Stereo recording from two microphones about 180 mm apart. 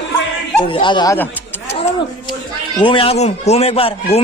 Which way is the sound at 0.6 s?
25° left (ahead or behind).